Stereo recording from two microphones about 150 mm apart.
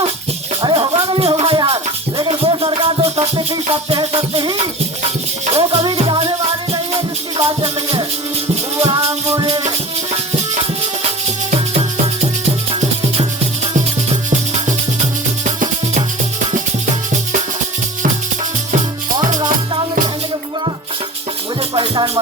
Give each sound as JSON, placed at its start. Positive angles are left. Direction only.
{"t": 0.6, "sound": "music", "side_deg": -30}
{"t": 9.3, "sound": "music", "side_deg": -30}
{"t": 19.1, "sound": "music", "side_deg": -30}
{"t": 21.8, "sound": "music", "side_deg": -30}